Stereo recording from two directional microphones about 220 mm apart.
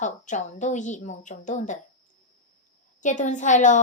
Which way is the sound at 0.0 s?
35° left (ahead or behind).